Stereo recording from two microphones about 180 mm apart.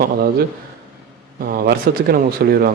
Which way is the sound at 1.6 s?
60° right (ahead or behind).